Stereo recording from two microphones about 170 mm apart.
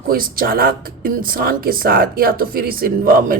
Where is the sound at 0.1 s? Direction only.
60° right (ahead or behind).